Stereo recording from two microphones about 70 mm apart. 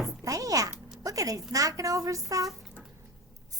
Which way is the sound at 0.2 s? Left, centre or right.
Right.